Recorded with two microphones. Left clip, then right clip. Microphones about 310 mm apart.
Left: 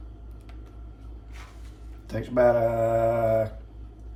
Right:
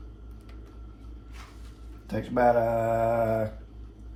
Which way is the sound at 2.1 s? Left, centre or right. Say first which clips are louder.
Left 2 dB; centre.